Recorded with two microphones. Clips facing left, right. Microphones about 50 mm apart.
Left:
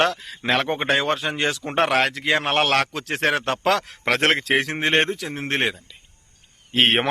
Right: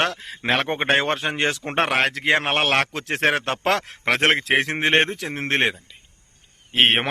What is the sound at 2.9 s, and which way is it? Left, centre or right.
Speech, right.